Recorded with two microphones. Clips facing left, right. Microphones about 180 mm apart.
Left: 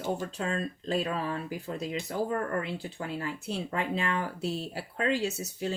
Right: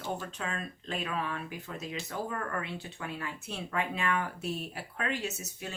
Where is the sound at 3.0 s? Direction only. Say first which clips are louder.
Left 5 dB; 35° left (ahead or behind).